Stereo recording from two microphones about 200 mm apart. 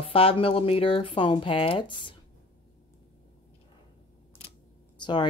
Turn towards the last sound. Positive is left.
turn(degrees=25)  # may be behind; listen again after turning